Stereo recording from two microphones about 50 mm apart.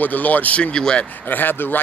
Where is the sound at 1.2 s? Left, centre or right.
Left.